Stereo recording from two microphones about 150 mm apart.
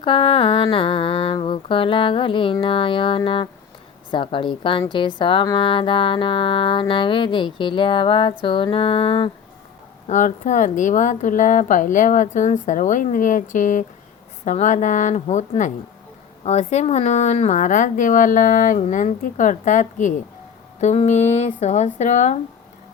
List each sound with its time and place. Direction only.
0.0 s speech: 35° left (ahead or behind)
10.1 s a woman's voice: 55° left (ahead or behind)